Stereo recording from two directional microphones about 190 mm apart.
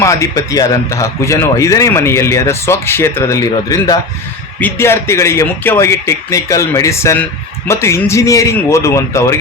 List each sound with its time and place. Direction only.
0.0 s a man's voice: 15° left (ahead or behind)